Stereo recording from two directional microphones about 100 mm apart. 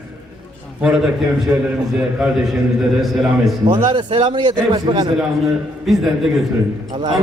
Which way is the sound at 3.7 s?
50° right (ahead or behind).